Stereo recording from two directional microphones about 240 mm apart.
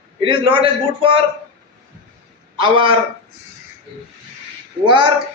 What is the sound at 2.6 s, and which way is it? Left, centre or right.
Speech, right.